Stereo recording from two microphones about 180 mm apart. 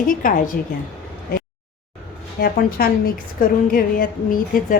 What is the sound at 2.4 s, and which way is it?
A woman's voice, 55° left (ahead or behind).